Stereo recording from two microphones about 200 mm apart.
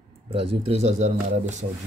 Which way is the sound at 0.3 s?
30° right (ahead or behind).